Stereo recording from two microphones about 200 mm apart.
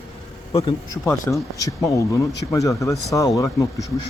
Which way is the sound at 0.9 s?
15° left (ahead or behind).